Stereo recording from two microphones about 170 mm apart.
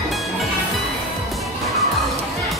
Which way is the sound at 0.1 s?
Centre (ahead or behind).